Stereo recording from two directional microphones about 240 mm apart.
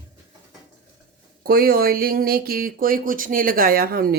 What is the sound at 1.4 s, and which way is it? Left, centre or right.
Speech, right.